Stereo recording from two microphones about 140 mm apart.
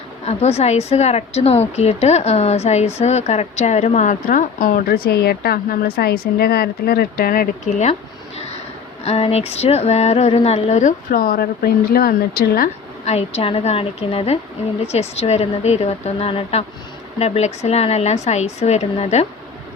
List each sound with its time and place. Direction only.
0.3 s a woman's voice: 50° left (ahead or behind); by 7.4 s 90° left
7.7 s speech: 60° left (ahead or behind)
9.0 s a woman's voice: 45° left (ahead or behind); by 12.7 s 90° left
13.1 s a woman's voice: 50° left (ahead or behind)